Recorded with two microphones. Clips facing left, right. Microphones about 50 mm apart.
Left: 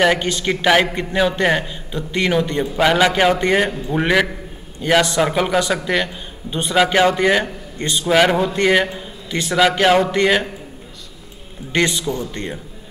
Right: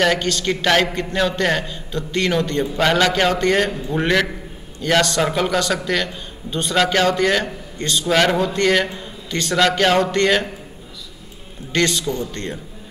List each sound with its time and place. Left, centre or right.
0.0 s a man's voice: centre
11.7 s a man's voice: centre